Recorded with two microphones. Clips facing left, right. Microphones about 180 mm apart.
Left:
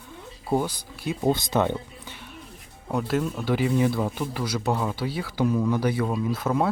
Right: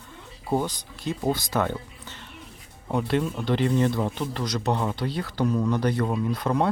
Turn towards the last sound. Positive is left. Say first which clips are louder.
# even
turn(degrees=5)  # may be behind; listen again after turning